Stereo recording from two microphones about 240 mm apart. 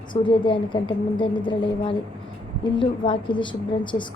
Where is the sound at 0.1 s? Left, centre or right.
Centre.